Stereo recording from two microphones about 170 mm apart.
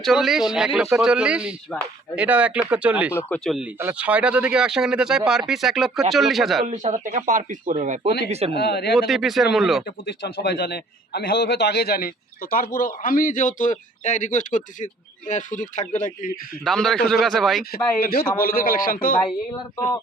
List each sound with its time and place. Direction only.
0.0 s speech: centre (ahead or behind)
3.2 s speech: 10° left (ahead or behind)
3.8 s speech: 10° right (ahead or behind)
6.7 s speech: 45° right (ahead or behind)
8.5 s speech: 75° left (ahead or behind)
9.0 s speech: centre (ahead or behind)
10.1 s a man's voice: 80° left; by 16.4 s 50° left (ahead or behind)
16.6 s speech: 5° left (ahead or behind)
18.0 s a man's voice: 60° left (ahead or behind)